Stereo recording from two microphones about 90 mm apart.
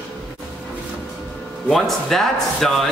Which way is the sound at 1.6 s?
5° left (ahead or behind).